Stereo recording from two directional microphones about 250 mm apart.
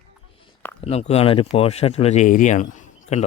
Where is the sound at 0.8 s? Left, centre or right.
Left.